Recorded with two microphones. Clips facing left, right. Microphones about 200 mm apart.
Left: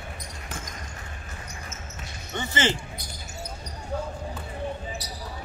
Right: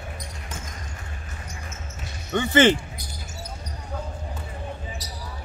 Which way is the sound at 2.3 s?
55° right (ahead or behind).